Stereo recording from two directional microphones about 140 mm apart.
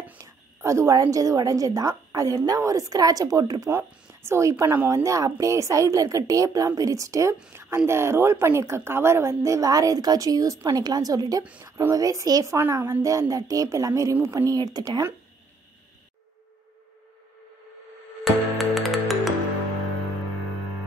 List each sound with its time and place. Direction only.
0.2 s a woman's voice: 20° right (ahead or behind)
18.2 s music: centre (ahead or behind)